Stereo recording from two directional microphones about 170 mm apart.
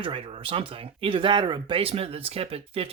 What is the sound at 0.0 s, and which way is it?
Speech, 30° right (ahead or behind).